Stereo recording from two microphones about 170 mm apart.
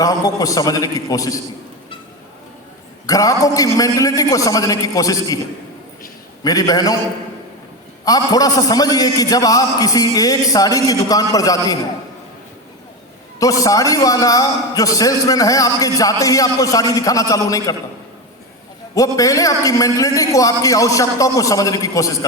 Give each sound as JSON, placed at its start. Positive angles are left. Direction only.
{"t": 0.0, "sound": "a man's voice", "side_deg": 20}
{"t": 3.1, "sound": "a man's voice", "side_deg": 20}
{"t": 6.4, "sound": "a man's voice", "side_deg": 20}
{"t": 8.0, "sound": "a man's voice", "side_deg": 20}
{"t": 13.4, "sound": "a man's voice", "side_deg": 20}
{"t": 18.9, "sound": "a man's voice", "side_deg": 20}